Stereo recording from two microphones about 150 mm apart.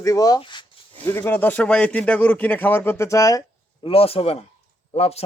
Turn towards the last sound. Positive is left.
turn(degrees=45)  # may be behind; listen again after turning